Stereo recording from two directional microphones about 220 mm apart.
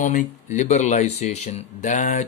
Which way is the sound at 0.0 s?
35° left (ahead or behind).